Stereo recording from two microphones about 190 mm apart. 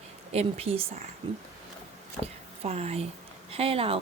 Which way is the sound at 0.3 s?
35° right (ahead or behind).